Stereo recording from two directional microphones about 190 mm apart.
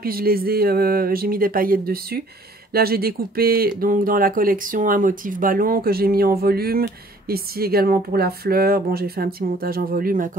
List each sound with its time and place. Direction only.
0.0 s speech: 50° right (ahead or behind)